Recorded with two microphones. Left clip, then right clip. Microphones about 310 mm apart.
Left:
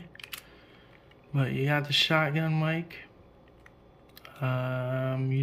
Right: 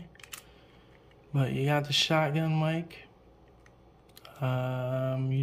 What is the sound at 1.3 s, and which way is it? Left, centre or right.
Speech, centre.